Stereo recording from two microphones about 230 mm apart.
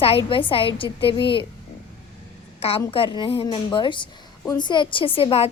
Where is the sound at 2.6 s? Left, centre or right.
Left.